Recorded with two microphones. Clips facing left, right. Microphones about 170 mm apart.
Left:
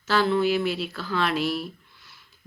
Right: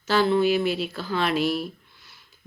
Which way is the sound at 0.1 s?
Centre (ahead or behind).